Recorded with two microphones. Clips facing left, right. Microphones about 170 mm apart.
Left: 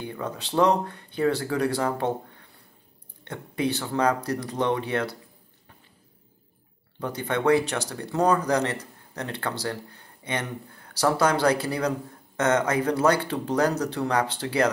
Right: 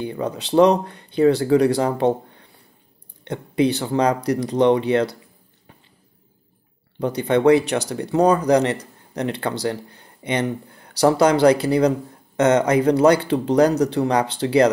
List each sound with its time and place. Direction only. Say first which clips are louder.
0.0 s speech: right 7 dB; 20° right (ahead or behind)
3.3 s speech: right 8 dB; 20° right (ahead or behind)
7.2 s speech: right 7 dB; 20° right (ahead or behind)